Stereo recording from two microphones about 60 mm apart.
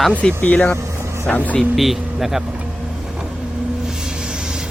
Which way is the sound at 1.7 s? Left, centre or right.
Centre.